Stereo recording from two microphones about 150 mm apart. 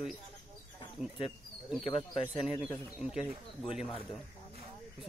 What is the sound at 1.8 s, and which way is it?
Speech, 35° left (ahead or behind).